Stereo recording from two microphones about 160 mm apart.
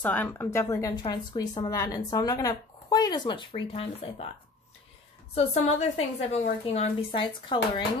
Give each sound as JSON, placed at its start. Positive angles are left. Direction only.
{"t": 0.0, "sound": "a woman's voice", "side_deg": 10}
{"t": 5.3, "sound": "a woman's voice", "side_deg": 40}